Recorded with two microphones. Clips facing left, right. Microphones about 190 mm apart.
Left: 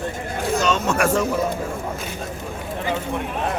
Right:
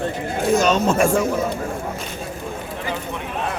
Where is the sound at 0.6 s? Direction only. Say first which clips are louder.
Right 1 dB; 40° right (ahead or behind).